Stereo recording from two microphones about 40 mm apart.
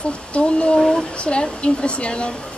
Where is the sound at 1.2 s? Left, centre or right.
Left.